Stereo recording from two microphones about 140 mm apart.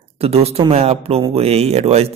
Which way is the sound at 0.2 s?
45° right (ahead or behind).